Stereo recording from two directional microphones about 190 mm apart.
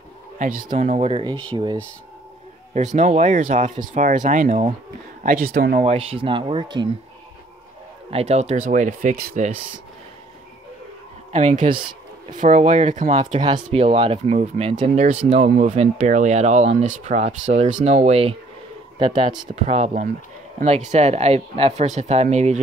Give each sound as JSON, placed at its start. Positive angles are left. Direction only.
{"t": 0.4, "sound": "speech", "side_deg": -50}
{"t": 0.7, "sound": "speech", "side_deg": -35}
{"t": 2.7, "sound": "speech", "side_deg": -40}
{"t": 5.2, "sound": "speech", "side_deg": -50}
{"t": 5.9, "sound": "speech", "side_deg": -30}
{"t": 8.1, "sound": "speech", "side_deg": -35}
{"t": 11.3, "sound": "speech", "side_deg": -40}
{"t": 11.7, "sound": "a sound", "side_deg": -25}
{"t": 12.4, "sound": "speech", "side_deg": -45}
{"t": 13.4, "sound": "speech", "side_deg": -25}
{"t": 19.5, "sound": "speech", "side_deg": -35}